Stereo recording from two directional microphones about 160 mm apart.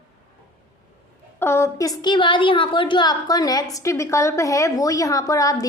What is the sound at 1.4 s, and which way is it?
A woman's voice, 15° left (ahead or behind).